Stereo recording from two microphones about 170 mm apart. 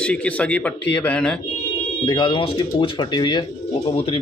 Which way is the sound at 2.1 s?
25° left (ahead or behind).